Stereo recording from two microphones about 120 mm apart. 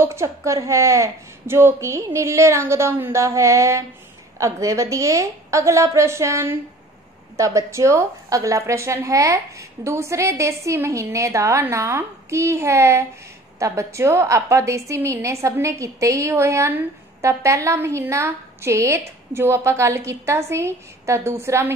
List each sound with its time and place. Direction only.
0.0 s a woman's voice: 25° right (ahead or behind)